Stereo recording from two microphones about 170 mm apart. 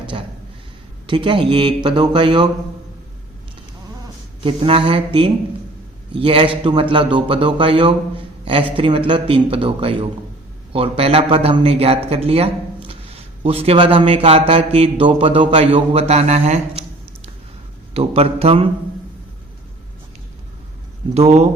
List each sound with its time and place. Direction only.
0.0 s a sound: 30° right (ahead or behind)
1.0 s speech: 30° right (ahead or behind)
4.4 s a man's voice: 30° right (ahead or behind)
17.9 s a man's voice: 35° right (ahead or behind)
21.1 s a man's voice: 40° right (ahead or behind)